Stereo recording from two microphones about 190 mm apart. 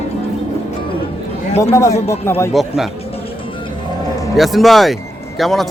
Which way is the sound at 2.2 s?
15° left (ahead or behind).